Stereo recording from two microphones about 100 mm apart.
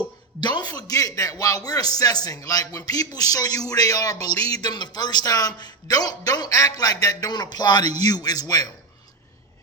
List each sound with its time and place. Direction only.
0.3 s a man's voice: 45° left (ahead or behind)
7.0 s a sound: 40° left (ahead or behind)
7.9 s a man's voice: 40° left (ahead or behind)